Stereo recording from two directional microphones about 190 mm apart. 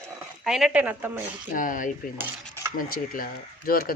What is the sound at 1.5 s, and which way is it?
Speech, 45° left (ahead or behind).